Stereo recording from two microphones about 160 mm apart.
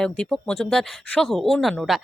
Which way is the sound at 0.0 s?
5° left (ahead or behind).